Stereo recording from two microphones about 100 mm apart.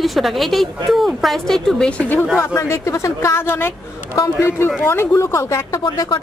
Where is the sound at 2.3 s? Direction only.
25° left (ahead or behind).